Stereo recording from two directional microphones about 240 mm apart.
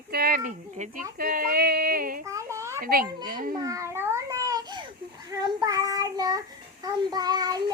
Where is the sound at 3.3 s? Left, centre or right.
Right.